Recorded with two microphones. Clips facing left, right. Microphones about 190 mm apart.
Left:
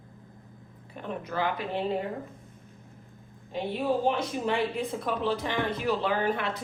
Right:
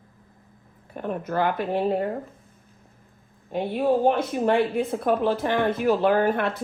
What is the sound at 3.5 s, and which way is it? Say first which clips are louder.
Speech: right 6 dB; 55° right (ahead or behind).